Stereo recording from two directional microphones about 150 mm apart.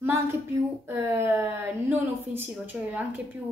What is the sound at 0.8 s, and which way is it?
A woman's voice, 15° right (ahead or behind).